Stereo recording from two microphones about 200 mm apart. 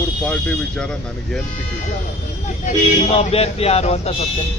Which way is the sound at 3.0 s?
30° left (ahead or behind).